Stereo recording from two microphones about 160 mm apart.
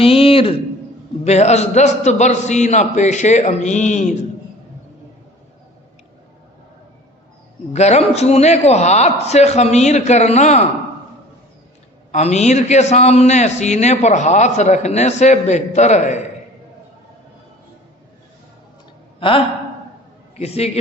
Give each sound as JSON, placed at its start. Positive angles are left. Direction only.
{"t": 0.0, "sound": "a man's voice", "side_deg": 35}
{"t": 7.7, "sound": "a man's voice", "side_deg": 45}
{"t": 12.1, "sound": "a man's voice", "side_deg": 45}
{"t": 19.2, "sound": "a man's voice", "side_deg": 30}